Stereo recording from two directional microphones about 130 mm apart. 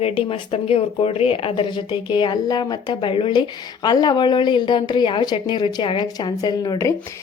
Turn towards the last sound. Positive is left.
turn(degrees=30)  # may be behind; listen again after turning